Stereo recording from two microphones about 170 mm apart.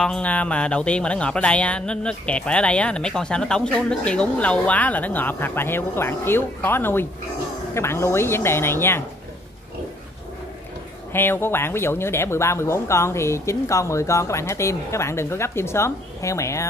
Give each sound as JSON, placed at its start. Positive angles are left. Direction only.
{"t": 0.0, "sound": "speech", "side_deg": 5}
{"t": 11.1, "sound": "speech", "side_deg": 15}